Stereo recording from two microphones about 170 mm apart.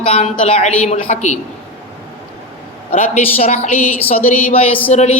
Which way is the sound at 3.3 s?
40° left (ahead or behind).